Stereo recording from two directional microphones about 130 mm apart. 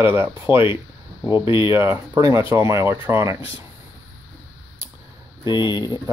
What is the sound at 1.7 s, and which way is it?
Speech, 20° right (ahead or behind).